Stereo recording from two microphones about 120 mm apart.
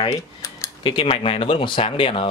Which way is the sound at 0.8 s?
45° left (ahead or behind).